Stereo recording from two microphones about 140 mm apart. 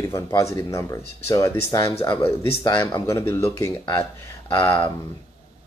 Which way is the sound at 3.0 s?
20° left (ahead or behind).